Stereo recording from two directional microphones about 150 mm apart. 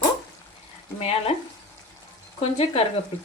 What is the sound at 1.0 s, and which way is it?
Frying, 45° left (ahead or behind).